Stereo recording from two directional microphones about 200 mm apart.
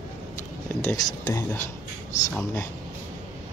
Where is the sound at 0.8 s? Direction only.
20° left (ahead or behind).